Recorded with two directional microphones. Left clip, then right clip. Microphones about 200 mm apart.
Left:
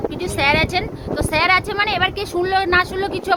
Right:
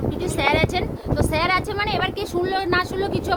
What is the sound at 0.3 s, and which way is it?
Speech, 10° left (ahead or behind).